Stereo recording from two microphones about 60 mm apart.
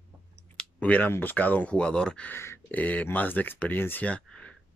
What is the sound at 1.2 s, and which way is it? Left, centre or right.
Speech, left.